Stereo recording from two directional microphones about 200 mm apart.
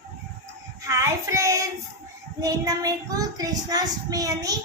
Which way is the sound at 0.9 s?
15° right (ahead or behind).